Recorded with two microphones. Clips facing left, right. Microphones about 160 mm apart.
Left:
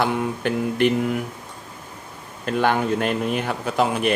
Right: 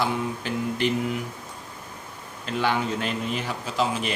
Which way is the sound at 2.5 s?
55° left (ahead or behind).